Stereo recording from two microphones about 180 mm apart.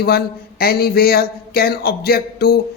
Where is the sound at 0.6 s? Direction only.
60° left (ahead or behind).